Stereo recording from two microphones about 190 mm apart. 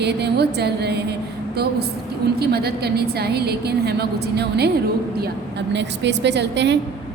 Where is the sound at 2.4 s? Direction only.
55° right (ahead or behind).